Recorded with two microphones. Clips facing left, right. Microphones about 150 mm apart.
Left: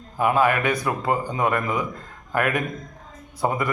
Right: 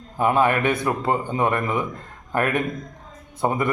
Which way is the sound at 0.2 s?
25° right (ahead or behind).